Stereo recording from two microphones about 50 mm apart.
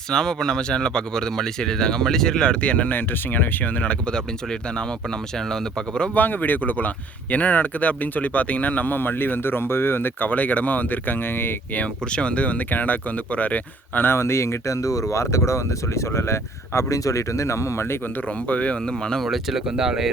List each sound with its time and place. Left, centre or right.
0.1 s speech: centre; by 3.9 s left
5.5 s speech: centre
6.1 s speech: left
11.8 s speech: left
14.0 s speech: left
18.4 s speech: left
19.2 s speech: centre
19.7 s speech: centre